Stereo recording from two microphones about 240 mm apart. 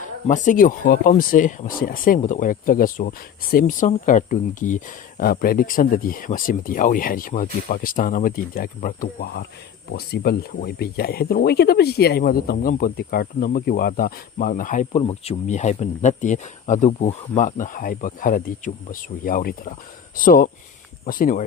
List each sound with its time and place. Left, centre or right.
0.3 s speech: left